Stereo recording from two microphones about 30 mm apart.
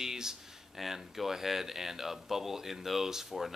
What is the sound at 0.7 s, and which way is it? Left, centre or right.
Speech, centre.